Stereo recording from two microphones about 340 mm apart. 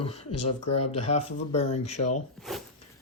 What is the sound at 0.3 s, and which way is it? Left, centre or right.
Speech, left.